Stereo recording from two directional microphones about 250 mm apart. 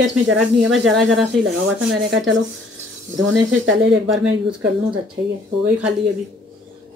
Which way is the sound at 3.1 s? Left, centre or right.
Right.